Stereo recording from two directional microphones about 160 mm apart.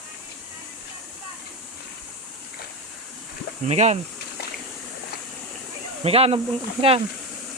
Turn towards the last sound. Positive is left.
turn(degrees=-35)  # may be behind; listen again after turning